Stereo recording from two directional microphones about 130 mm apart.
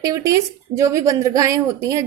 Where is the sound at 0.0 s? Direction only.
25° right (ahead or behind).